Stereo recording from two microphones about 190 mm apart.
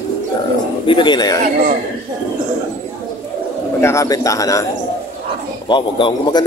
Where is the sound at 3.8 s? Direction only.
15° left (ahead or behind).